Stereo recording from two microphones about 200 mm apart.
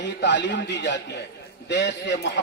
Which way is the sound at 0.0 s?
60° left (ahead or behind).